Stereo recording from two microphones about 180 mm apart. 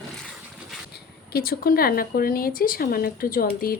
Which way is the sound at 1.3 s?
55° left (ahead or behind).